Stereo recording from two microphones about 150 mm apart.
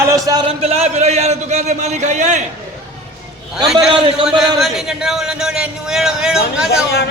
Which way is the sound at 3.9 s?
35° right (ahead or behind).